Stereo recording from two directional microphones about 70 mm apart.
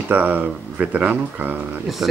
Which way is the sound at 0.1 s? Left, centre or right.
Right.